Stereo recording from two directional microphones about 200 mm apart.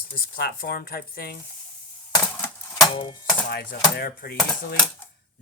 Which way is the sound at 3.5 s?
50° left (ahead or behind).